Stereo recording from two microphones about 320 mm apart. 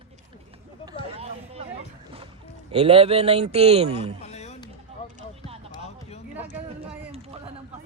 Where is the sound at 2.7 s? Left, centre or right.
Centre.